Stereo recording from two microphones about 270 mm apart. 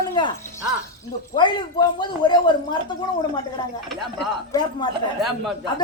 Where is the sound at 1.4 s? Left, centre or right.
Centre.